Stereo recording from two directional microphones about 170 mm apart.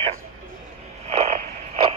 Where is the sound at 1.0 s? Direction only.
40° right (ahead or behind).